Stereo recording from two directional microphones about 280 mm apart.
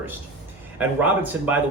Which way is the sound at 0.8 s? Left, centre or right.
Centre.